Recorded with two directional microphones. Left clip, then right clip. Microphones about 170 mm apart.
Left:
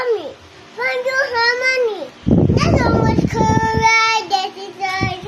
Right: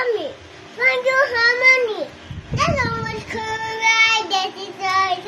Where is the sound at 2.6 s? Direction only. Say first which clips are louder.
Left 4 dB; 25° left (ahead or behind).